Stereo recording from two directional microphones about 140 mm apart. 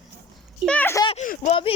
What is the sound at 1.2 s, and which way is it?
Speech, 65° left (ahead or behind).